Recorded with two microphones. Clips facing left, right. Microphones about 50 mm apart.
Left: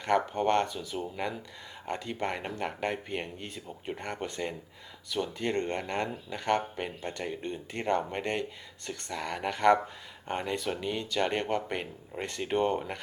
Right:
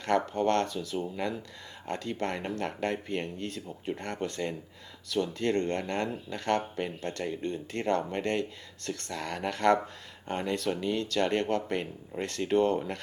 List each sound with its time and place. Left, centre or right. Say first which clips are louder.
0.0 s speech: even; centre
0.9 s speech: right 1 dB; centre; by 12.8 s left